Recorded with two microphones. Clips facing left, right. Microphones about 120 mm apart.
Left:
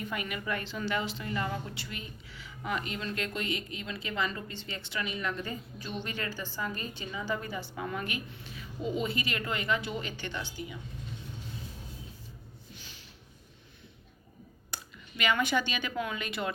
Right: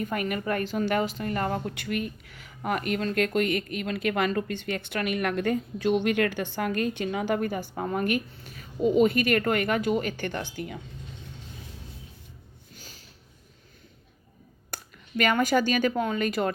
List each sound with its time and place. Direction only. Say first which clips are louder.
0.0 s a woman's voice: right 7 dB; 50° right (ahead or behind)
12.7 s a sound: right 3 dB; 40° right (ahead or behind)
14.7 s speech: right 8 dB; 45° right (ahead or behind)